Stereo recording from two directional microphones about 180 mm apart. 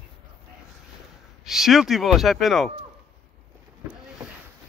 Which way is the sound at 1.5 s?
Centre (ahead or behind).